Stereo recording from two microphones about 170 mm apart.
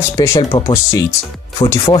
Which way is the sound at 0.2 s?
20° left (ahead or behind).